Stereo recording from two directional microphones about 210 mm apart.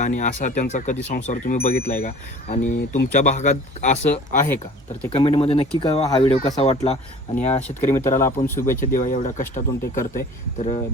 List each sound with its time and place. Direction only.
0.0 s speech: 35° left (ahead or behind)
8.2 s speech: 10° left (ahead or behind)
8.9 s speech: 40° left (ahead or behind)